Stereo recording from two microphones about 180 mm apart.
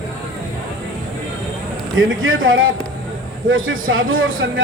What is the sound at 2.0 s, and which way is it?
A man's voice, 90° right.